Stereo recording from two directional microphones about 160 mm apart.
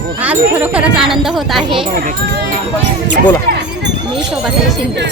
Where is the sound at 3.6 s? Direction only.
90° right.